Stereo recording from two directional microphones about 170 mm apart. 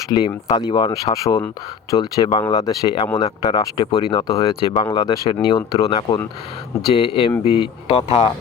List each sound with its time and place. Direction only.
0.1 s speech: 25° left (ahead or behind)